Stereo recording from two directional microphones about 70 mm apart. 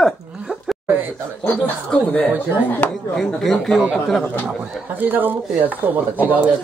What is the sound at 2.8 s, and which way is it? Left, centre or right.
Speech, centre.